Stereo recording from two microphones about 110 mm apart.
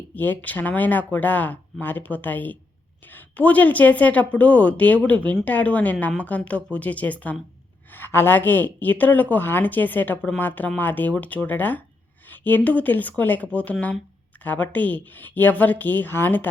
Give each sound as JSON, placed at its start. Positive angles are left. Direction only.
{"t": 0.1, "sound": "speech", "side_deg": 15}